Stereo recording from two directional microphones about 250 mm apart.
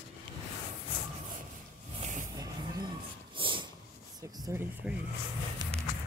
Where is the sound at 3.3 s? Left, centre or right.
Centre.